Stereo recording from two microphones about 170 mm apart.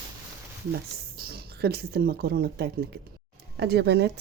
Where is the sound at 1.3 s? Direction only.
70° right (ahead or behind).